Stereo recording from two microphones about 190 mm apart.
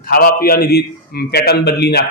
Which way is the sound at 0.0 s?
50° left (ahead or behind).